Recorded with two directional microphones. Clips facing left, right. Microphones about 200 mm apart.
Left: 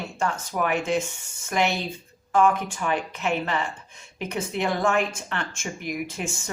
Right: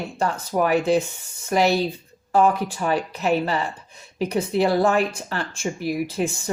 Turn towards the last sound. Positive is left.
turn(degrees=-35)  # may be behind; listen again after turning